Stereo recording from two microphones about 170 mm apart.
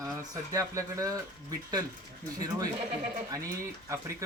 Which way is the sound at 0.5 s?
20° right (ahead or behind).